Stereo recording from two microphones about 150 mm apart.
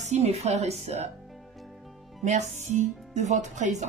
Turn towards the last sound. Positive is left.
turn(degrees=-50)  # may be behind; listen again after turning